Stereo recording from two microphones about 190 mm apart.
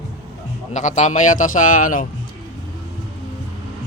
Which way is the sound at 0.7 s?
40° left (ahead or behind).